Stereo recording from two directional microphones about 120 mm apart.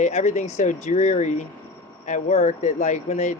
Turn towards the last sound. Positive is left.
turn(degrees=75)  # may be behind; listen again after turning